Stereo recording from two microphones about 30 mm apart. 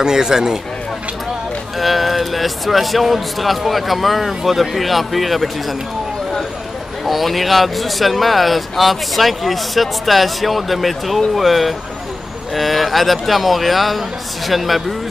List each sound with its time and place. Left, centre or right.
0.0 s speech: right
1.8 s speech: centre
7.1 s speech: centre